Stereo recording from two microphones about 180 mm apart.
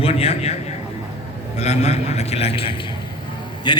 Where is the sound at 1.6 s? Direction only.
35° left (ahead or behind).